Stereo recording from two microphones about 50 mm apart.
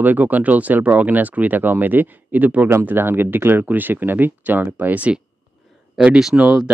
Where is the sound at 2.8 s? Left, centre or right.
Right.